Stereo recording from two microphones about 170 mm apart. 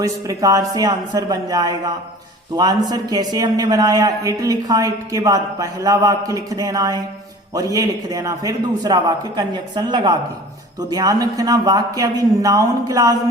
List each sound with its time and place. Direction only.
0.0 s a woman's voice: 20° right (ahead or behind)